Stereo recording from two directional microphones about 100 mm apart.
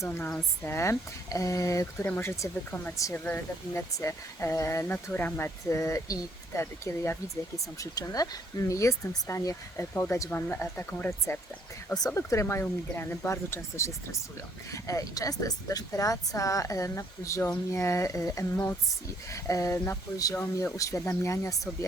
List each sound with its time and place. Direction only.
0.2 s speech: 10° left (ahead or behind)
0.6 s speech: 25° left (ahead or behind)
9.9 s speech: 20° left (ahead or behind)
19.3 s speech: 35° left (ahead or behind)